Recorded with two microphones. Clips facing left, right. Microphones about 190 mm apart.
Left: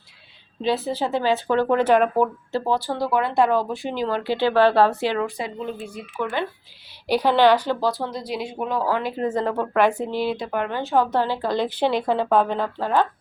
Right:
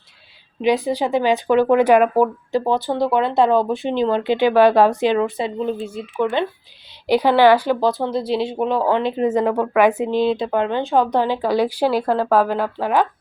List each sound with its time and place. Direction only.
0.6 s speech: 15° right (ahead or behind)
7.1 s speech: 10° right (ahead or behind)